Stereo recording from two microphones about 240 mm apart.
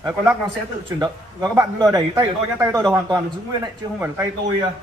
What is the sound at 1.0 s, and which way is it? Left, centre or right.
A man's voice, centre.